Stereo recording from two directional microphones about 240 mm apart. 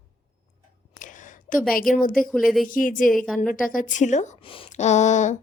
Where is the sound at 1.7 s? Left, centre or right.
Left.